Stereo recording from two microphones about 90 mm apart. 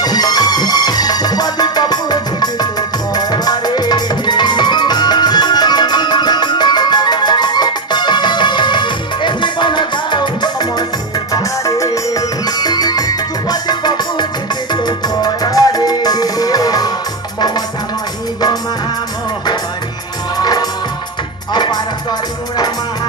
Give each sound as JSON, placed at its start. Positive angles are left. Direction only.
{"t": 0.0, "sound": "music", "side_deg": 50}
{"t": 11.3, "sound": "music", "side_deg": 40}
{"t": 20.3, "sound": "music", "side_deg": 45}